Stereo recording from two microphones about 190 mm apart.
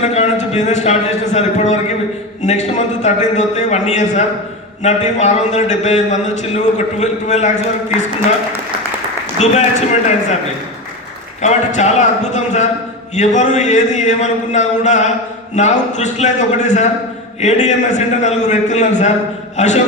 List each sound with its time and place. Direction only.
0.0 s a man's voice: 35° left (ahead or behind)
9.4 s a man's voice: 40° left (ahead or behind)
11.4 s a man's voice: 40° left (ahead or behind)